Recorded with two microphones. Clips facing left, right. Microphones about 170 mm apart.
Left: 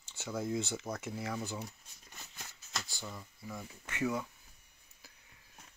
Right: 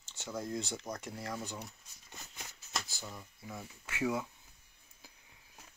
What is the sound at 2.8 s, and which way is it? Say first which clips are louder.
Speech: left 1 dB; centre (ahead or behind).